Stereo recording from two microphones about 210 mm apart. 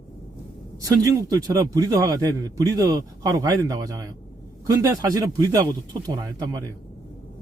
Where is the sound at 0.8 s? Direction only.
15° right (ahead or behind).